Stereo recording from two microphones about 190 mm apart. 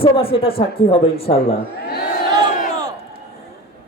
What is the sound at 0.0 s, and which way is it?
A woman's voice, 30° left (ahead or behind).